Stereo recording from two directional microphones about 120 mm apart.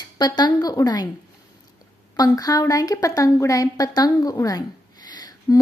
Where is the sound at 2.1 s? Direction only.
30° left (ahead or behind).